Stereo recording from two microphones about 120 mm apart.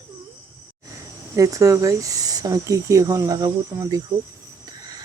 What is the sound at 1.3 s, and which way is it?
Speech, 25° right (ahead or behind).